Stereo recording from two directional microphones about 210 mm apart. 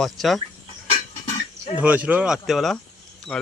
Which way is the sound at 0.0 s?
Centre (ahead or behind).